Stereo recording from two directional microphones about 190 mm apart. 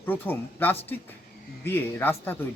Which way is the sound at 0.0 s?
10° left (ahead or behind).